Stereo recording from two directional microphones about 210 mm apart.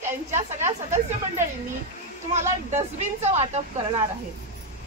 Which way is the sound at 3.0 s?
30° right (ahead or behind).